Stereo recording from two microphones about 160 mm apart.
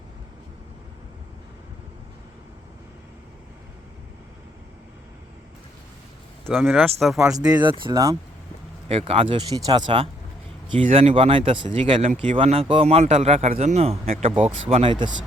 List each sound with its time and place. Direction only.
6.4 s speech: centre (ahead or behind)
7.3 s speech: 25° right (ahead or behind)
8.9 s speech: 35° right (ahead or behind)